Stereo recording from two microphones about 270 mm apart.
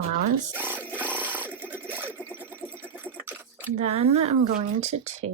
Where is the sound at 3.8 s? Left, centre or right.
Right.